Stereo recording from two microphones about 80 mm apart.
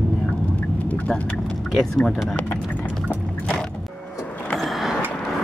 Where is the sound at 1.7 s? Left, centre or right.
Centre.